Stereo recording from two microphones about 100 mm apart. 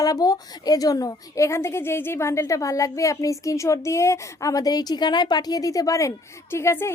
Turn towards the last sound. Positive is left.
turn(degrees=25)  # may be behind; listen again after turning